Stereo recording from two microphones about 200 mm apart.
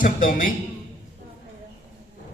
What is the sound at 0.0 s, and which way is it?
Speech, 40° left (ahead or behind).